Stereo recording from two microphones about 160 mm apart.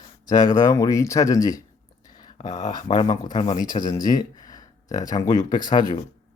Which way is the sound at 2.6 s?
30° left (ahead or behind).